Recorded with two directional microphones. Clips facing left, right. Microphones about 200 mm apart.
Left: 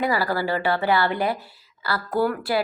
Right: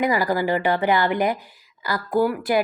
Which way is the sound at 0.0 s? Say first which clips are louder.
Right 2 dB; 15° right (ahead or behind).